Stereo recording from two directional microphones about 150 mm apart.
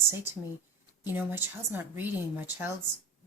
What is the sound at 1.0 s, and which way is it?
Speech, 15° right (ahead or behind).